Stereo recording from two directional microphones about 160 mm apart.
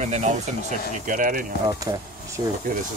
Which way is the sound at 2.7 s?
65° right (ahead or behind).